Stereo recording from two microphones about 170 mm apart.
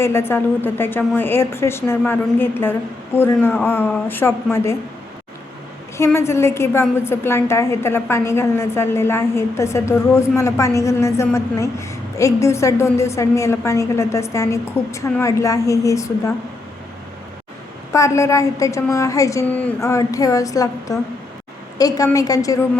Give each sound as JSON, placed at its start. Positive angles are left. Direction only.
{"t": 0.0, "sound": "a woman's voice", "side_deg": 15}
{"t": 6.1, "sound": "a woman's voice", "side_deg": 15}
{"t": 17.9, "sound": "a woman's voice", "side_deg": 15}